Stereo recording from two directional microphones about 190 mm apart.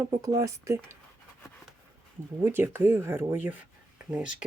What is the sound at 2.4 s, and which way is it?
Speech, 10° right (ahead or behind).